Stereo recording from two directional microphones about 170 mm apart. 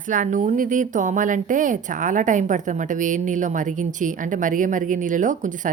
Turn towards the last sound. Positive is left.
turn(degrees=-50)  # may be behind; listen again after turning